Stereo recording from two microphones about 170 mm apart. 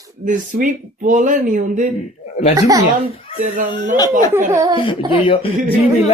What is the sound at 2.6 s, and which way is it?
Speech, 20° right (ahead or behind).